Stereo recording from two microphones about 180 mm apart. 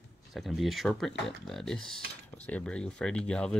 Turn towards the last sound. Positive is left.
turn(degrees=5)  # may be behind; listen again after turning